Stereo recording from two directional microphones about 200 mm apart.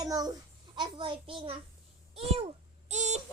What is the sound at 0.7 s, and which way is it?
Speech, 25° right (ahead or behind).